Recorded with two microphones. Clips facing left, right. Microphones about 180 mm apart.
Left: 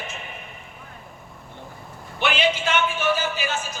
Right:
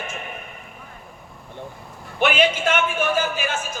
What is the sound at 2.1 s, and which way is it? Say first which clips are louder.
A man's voice: right 3 dB; 50° right (ahead or behind).